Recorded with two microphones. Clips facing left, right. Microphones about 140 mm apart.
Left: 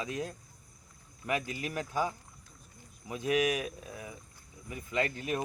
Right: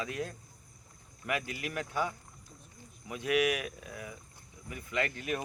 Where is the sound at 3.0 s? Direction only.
30° left (ahead or behind).